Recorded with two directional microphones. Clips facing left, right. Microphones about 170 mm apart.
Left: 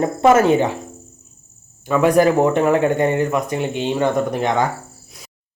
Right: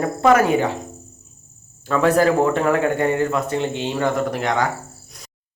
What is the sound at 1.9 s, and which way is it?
Speech, 15° left (ahead or behind).